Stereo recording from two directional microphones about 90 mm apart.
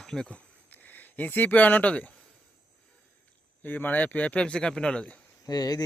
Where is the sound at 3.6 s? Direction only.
20° left (ahead or behind).